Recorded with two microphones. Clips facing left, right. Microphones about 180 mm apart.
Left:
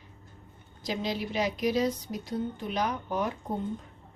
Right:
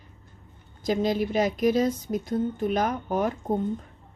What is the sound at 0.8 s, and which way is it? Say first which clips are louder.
A woman's voice: right 8 dB; 50° right (ahead or behind).